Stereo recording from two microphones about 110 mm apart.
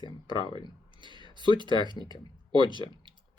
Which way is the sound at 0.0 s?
45° left (ahead or behind).